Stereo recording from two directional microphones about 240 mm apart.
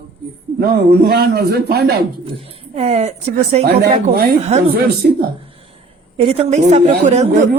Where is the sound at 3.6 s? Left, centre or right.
Right.